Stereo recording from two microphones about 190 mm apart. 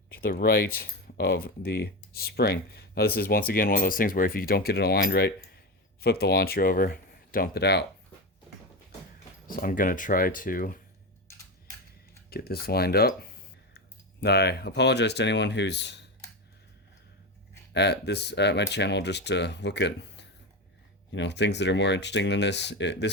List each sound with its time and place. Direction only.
0.1 s speech: 50° left (ahead or behind)
9.5 s speech: 50° left (ahead or behind)
12.3 s speech: 55° left (ahead or behind)
17.7 s speech: 60° left (ahead or behind)